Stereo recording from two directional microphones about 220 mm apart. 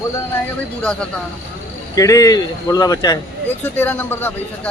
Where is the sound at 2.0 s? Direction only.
15° left (ahead or behind).